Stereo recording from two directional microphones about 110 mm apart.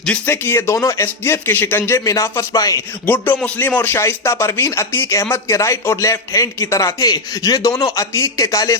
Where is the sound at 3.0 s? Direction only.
20° left (ahead or behind).